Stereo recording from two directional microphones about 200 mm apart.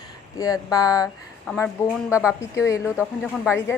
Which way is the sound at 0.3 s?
20° left (ahead or behind).